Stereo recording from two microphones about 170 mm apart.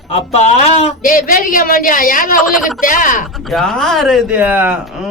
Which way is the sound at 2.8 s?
50° left (ahead or behind).